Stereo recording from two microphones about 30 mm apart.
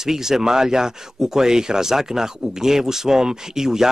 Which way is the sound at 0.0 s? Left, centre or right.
Centre.